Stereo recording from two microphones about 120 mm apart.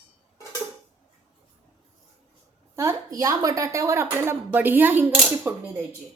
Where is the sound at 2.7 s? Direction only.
25° right (ahead or behind).